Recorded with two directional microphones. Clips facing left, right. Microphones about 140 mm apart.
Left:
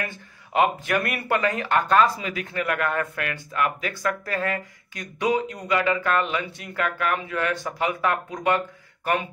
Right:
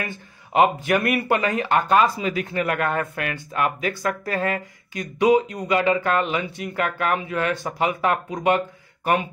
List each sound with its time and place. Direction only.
0.5 s speech: 20° right (ahead or behind)
2.2 s speech: 25° right (ahead or behind)